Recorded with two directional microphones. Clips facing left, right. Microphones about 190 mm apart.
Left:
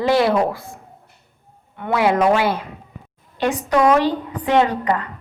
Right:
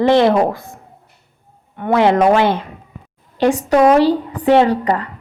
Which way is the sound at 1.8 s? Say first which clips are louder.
Right 4 dB; 40° right (ahead or behind).